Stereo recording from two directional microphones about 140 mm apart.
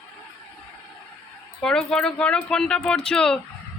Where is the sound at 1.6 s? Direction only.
5° left (ahead or behind).